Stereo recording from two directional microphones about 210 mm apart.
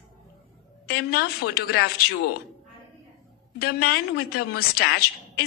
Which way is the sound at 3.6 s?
45° left (ahead or behind).